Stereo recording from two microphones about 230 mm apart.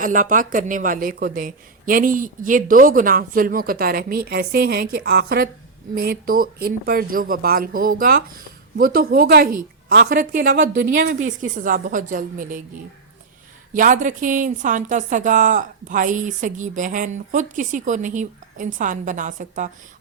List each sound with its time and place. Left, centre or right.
0.0 s speech: right
11.0 s a woman's voice: right
11.3 s speech: right
13.7 s speech: right